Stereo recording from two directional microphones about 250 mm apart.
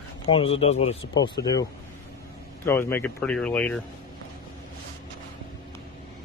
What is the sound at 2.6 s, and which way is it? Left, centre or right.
Speech, centre.